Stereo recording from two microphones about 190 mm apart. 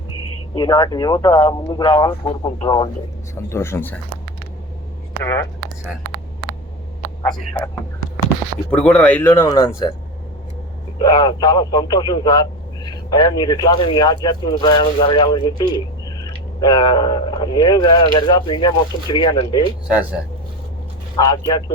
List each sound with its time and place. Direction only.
0.5 s a man's voice: 20° left (ahead or behind)
3.3 s speech: 15° left (ahead or behind)
5.2 s speech: 15° left (ahead or behind)
7.3 s speech: 5° left (ahead or behind)
8.7 s speech: 5° left (ahead or behind)
10.9 s a man's voice: 20° left (ahead or behind)
21.2 s a man's voice: 20° left (ahead or behind)